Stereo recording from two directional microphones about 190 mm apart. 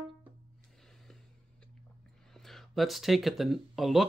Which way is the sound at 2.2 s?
Centre (ahead or behind).